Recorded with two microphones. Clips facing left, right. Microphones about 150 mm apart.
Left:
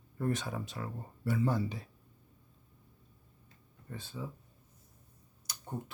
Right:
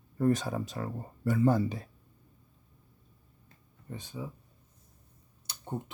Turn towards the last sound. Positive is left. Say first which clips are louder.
# right 4 dB
turn(degrees=-25)  # may be behind; listen again after turning